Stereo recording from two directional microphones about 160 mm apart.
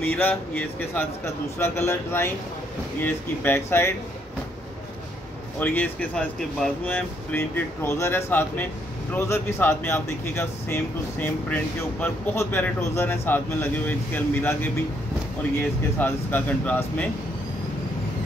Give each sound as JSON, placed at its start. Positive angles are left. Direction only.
{"t": 0.0, "sound": "speech", "side_deg": 10}
{"t": 5.6, "sound": "speech", "side_deg": 10}
{"t": 16.0, "sound": "speech", "side_deg": 10}